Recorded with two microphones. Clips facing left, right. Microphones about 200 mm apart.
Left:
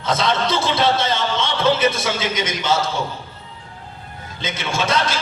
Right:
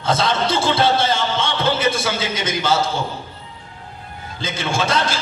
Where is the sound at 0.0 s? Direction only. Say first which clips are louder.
Right 1 dB; 30° right (ahead or behind).